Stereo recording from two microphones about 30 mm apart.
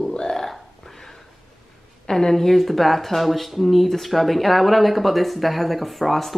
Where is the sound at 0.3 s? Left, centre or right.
Centre.